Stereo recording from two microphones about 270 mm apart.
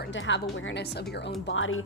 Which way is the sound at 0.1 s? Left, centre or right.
Left.